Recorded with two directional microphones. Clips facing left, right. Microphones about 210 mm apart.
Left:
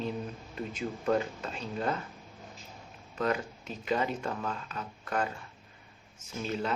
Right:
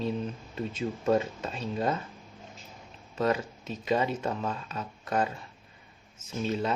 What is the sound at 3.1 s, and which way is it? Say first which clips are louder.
Speech: right 3 dB; 25° right (ahead or behind).